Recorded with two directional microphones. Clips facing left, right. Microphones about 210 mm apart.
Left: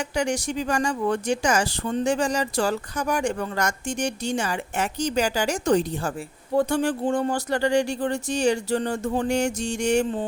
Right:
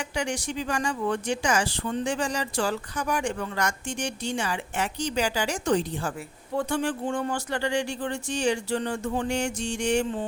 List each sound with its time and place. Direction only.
0.2 s speech: 40° left (ahead or behind)